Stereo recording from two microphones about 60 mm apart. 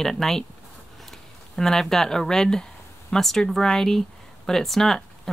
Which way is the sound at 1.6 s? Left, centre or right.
Centre.